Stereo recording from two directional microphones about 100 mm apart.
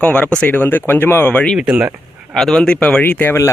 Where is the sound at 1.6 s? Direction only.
15° right (ahead or behind).